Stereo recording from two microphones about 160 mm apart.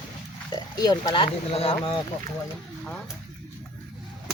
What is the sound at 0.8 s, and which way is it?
Speech, 25° left (ahead or behind).